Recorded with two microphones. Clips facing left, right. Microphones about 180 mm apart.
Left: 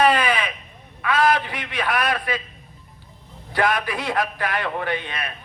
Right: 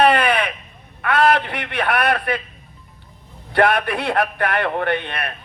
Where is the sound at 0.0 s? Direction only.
60° right (ahead or behind).